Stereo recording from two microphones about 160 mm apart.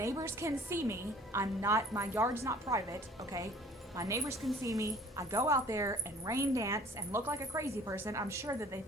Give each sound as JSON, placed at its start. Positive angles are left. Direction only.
{"t": 0.0, "sound": "a woman's voice", "side_deg": -20}